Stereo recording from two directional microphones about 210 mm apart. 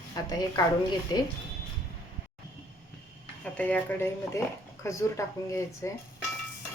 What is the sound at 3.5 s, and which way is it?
Speech, 5° left (ahead or behind).